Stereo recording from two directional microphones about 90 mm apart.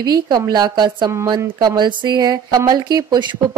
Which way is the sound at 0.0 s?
50° right (ahead or behind).